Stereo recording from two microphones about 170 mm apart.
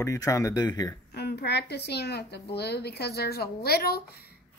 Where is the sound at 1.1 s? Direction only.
75° left (ahead or behind).